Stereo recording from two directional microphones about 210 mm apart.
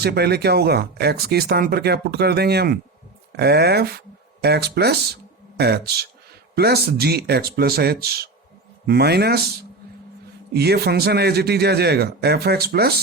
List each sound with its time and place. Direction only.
0.0 s speech: 50° right (ahead or behind)
10.5 s speech: 50° right (ahead or behind)